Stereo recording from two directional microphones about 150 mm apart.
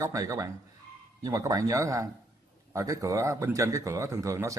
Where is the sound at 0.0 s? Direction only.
20° right (ahead or behind).